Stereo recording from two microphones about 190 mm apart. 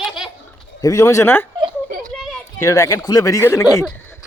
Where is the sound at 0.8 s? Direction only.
15° left (ahead or behind).